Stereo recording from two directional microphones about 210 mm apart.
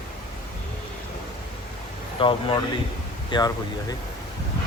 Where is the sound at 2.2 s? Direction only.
25° left (ahead or behind).